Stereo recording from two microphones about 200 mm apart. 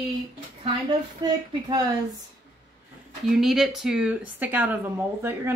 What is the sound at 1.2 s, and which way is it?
Speech, 20° right (ahead or behind).